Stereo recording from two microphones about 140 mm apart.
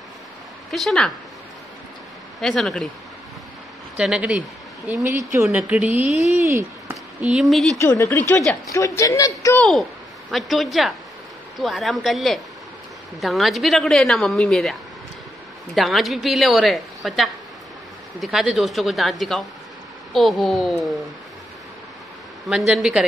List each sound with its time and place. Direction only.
0.7 s a woman's voice: centre (ahead or behind)
2.4 s a woman's voice: 5° left (ahead or behind)
3.9 s speech: 10° right (ahead or behind)
7.2 s a woman's voice: 5° right (ahead or behind)
7.8 s speech: 20° left (ahead or behind)
9.6 s a woman's voice: centre (ahead or behind)
22.5 s a woman's voice: 5° right (ahead or behind)